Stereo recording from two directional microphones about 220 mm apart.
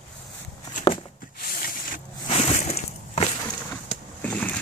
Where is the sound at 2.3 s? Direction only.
30° left (ahead or behind).